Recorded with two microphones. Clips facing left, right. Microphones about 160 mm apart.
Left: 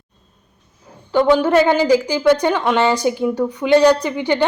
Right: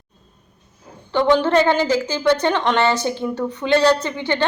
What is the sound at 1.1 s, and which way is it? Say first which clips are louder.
A woman's voice: left 2 dB; 10° left (ahead or behind).